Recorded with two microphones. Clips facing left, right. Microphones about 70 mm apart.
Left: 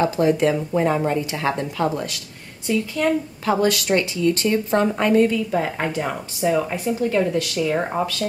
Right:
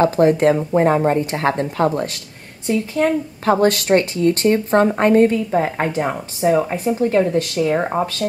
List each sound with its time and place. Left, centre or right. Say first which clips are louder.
0.0 s a woman's voice: right 4 dB; right
7.7 s speech: right 3 dB; right